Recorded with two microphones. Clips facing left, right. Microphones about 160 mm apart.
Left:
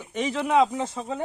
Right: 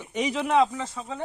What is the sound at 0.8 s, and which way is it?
Speech, 25° left (ahead or behind).